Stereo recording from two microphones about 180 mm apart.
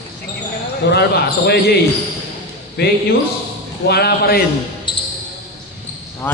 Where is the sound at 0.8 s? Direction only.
65° left (ahead or behind).